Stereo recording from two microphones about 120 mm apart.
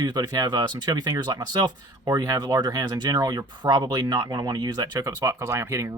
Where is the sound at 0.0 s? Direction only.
35° right (ahead or behind).